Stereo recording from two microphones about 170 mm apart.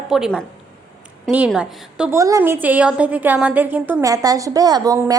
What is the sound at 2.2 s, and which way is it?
A woman's voice, 20° right (ahead or behind).